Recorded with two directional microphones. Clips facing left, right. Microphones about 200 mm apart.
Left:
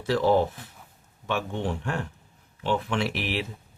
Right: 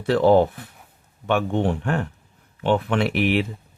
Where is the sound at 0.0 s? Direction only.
60° right (ahead or behind).